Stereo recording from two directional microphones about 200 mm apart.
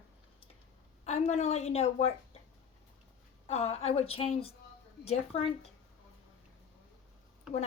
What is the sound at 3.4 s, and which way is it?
Speech, 30° left (ahead or behind).